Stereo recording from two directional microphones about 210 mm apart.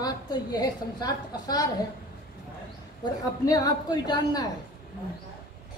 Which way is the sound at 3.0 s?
15° left (ahead or behind).